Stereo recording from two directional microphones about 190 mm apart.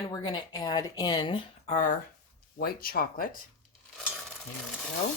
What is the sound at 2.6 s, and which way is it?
Speech, 50° left (ahead or behind).